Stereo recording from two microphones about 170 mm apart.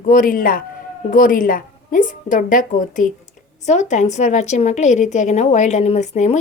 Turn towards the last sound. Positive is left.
turn(degrees=45)  # may be behind; listen again after turning